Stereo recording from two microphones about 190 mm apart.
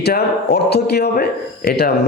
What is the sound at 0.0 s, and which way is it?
Speech, 60° left (ahead or behind).